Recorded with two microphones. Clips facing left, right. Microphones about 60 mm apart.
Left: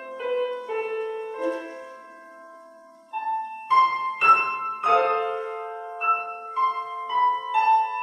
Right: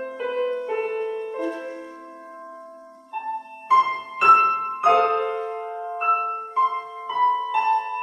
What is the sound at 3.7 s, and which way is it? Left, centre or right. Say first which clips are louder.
Music: right 1 dB; centre.